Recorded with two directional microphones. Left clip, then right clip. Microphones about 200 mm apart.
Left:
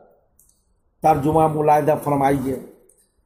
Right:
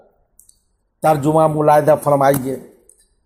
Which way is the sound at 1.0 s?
25° right (ahead or behind).